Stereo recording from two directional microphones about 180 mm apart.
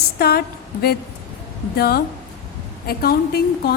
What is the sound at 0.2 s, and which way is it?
A woman's voice, 60° left (ahead or behind).